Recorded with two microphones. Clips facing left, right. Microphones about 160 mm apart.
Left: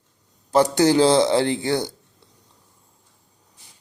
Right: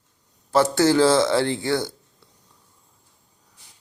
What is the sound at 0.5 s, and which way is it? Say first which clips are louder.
A man's voice: left 1 dB; 15° left (ahead or behind).